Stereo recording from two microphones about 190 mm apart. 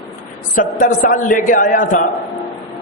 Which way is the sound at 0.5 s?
45° left (ahead or behind).